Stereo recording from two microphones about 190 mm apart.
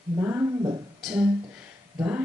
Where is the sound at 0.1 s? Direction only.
10° right (ahead or behind).